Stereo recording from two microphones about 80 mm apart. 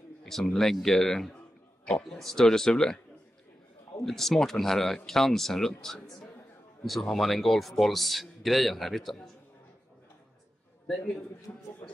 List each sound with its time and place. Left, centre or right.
0.2 s a man's voice: centre
4.0 s a man's voice: centre
11.5 s a man's voice: left